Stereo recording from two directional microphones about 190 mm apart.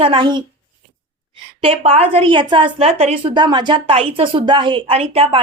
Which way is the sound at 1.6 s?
30° right (ahead or behind).